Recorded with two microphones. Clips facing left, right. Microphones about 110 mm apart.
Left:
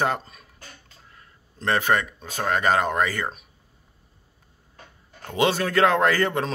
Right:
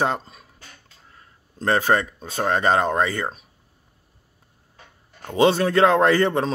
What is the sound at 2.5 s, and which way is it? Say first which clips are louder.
Speech: right 2 dB; 30° right (ahead or behind).